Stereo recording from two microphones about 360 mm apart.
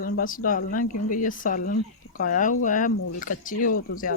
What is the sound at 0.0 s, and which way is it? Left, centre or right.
Speech, left.